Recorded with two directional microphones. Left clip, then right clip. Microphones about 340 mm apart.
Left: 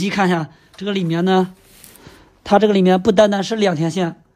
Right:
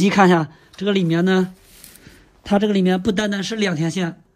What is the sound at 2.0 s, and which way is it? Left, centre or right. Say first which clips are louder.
A man's voice: left 6 dB; centre.